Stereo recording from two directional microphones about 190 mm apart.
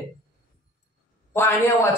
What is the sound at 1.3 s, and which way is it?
Speech, 15° left (ahead or behind).